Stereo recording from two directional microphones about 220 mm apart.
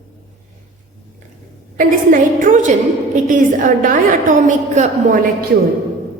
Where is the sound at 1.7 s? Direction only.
35° right (ahead or behind).